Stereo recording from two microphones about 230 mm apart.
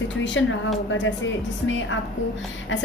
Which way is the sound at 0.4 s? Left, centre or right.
Left.